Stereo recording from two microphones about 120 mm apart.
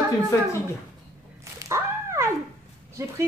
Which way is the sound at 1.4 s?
25° right (ahead or behind).